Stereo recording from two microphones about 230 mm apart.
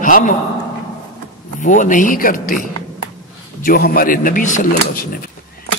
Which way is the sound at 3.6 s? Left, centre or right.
Left.